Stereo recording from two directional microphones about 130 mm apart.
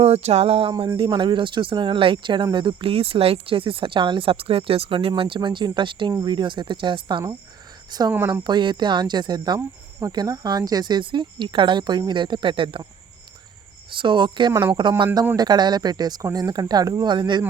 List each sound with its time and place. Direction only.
0.0 s a sound: 55° right (ahead or behind)
0.9 s speech: 40° right (ahead or behind)
13.9 s speech: 40° right (ahead or behind)